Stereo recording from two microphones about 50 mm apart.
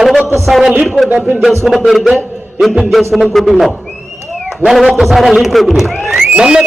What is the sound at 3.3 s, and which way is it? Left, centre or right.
Speech, centre.